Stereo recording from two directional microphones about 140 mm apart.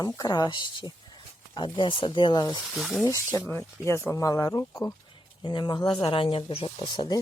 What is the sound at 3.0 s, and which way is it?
Speech, 25° left (ahead or behind).